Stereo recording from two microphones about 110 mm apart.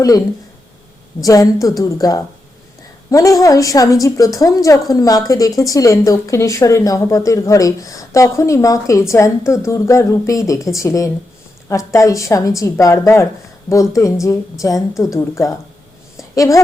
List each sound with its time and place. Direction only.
1.2 s a woman's voice: 30° left (ahead or behind)